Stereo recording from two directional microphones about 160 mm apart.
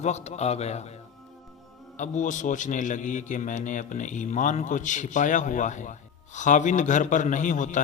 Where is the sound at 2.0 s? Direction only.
50° left (ahead or behind).